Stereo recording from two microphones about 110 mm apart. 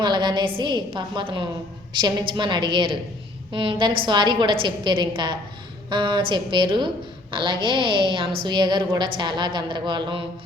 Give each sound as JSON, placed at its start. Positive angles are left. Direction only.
{"t": 0.0, "sound": "a woman's voice", "side_deg": -45}